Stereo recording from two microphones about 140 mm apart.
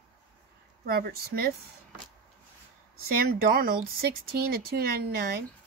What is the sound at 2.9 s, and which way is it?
Speech, 90° right.